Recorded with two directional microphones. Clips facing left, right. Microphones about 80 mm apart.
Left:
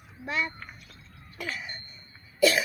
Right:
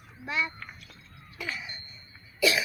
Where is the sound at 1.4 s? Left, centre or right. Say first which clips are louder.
Left 1 dB; left.